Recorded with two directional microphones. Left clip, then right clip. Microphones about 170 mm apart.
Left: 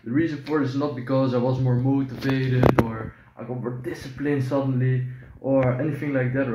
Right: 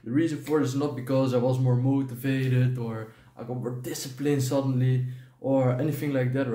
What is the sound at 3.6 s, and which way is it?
Speech, 20° right (ahead or behind).